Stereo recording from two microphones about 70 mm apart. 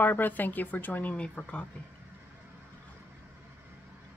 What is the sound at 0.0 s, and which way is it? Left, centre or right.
Speech, left.